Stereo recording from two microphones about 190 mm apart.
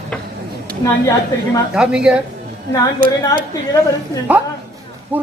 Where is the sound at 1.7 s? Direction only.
5° right (ahead or behind).